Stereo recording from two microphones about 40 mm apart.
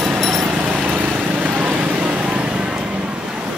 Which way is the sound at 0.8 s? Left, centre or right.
Right.